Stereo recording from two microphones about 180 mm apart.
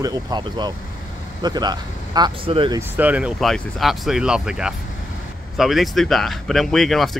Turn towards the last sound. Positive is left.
turn(degrees=0)  # may be behind; listen again after turning